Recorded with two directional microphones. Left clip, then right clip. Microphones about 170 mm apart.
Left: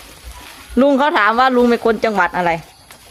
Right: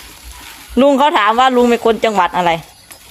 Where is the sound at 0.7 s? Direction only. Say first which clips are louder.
Right 2 dB; centre (ahead or behind).